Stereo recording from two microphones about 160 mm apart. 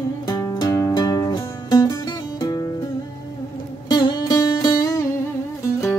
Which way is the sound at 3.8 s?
25° left (ahead or behind).